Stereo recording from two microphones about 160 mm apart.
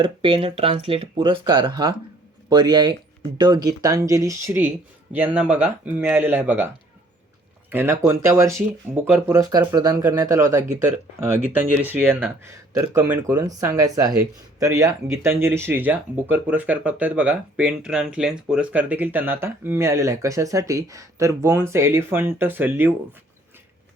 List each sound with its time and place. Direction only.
0.0 s speech: 35° right (ahead or behind); by 6.7 s 10° right (ahead or behind)
7.7 s speech: 10° right (ahead or behind)